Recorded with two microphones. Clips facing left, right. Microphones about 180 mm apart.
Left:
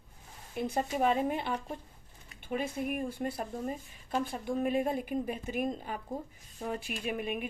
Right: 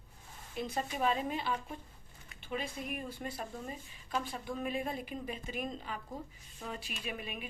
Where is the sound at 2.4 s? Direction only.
50° left (ahead or behind).